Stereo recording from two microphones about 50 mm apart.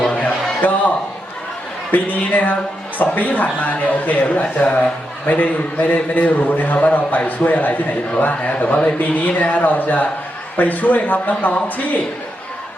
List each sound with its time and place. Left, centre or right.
0.1 s music: left
1.9 s a man's voice: left